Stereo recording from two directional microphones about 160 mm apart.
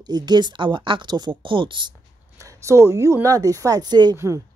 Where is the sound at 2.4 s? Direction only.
20° right (ahead or behind).